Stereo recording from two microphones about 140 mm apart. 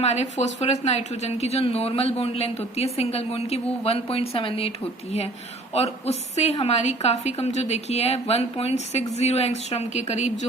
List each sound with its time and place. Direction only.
0.0 s a woman's voice: 50° left (ahead or behind)
5.7 s a woman's voice: 50° left (ahead or behind)